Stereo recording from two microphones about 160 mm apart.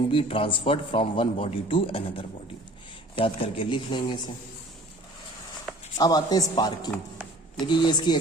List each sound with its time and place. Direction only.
0.1 s a man's voice: 35° left (ahead or behind)
6.0 s a woman's voice: 25° left (ahead or behind)